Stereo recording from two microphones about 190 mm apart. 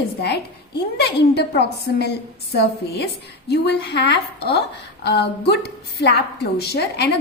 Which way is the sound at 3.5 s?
60° left (ahead or behind).